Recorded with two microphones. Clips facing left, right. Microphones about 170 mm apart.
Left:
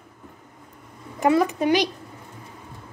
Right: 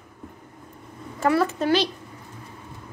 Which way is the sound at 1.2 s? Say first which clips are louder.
Left 2 dB; 15° left (ahead or behind).